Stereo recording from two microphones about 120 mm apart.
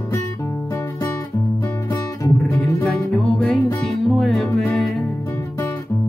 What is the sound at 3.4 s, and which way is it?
Music, 10° left (ahead or behind).